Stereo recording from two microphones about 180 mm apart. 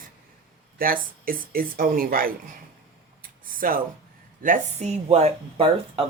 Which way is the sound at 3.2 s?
50° right (ahead or behind).